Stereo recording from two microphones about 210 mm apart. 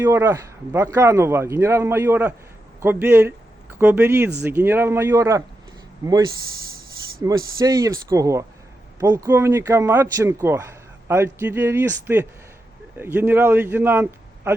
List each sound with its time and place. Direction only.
0.0 s speech: 10° right (ahead or behind)
7.2 s speech: 15° right (ahead or behind)